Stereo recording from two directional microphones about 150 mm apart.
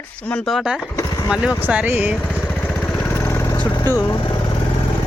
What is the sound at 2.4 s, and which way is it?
Vehicle, 10° left (ahead or behind).